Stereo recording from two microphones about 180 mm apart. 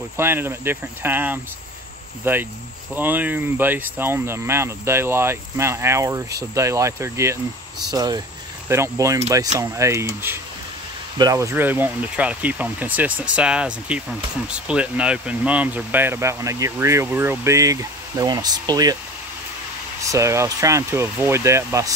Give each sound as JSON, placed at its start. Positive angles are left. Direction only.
{"t": 0.2, "sound": "speech", "side_deg": -15}
{"t": 20.1, "sound": "speech", "side_deg": -15}